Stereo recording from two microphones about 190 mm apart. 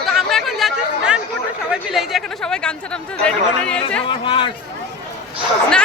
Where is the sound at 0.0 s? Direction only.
Centre (ahead or behind).